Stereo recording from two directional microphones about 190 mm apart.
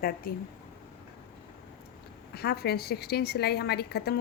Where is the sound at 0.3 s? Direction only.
50° left (ahead or behind).